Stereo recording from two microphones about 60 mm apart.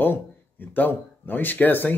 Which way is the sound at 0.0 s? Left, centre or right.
Left.